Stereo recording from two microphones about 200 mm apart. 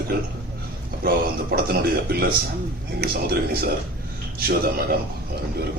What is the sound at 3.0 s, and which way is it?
A man's voice, 50° right (ahead or behind).